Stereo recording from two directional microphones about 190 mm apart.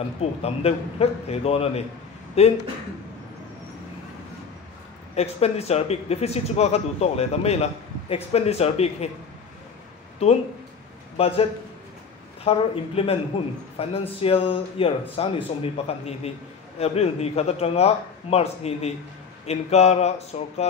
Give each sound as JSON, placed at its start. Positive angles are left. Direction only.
{"t": 0.2, "sound": "a man's voice", "side_deg": 30}
{"t": 5.1, "sound": "a man's voice", "side_deg": 35}
{"t": 10.2, "sound": "a man's voice", "side_deg": 30}
{"t": 12.4, "sound": "a man's voice", "side_deg": 30}